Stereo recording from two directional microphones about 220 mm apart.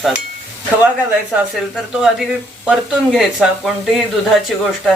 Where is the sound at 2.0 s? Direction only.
Centre (ahead or behind).